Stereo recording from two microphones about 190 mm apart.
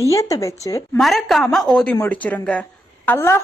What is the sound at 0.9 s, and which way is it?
A woman's voice, centre (ahead or behind).